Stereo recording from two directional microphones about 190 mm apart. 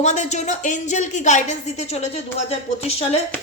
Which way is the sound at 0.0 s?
40° left (ahead or behind).